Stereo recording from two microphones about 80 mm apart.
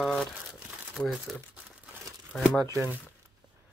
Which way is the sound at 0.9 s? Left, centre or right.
Centre.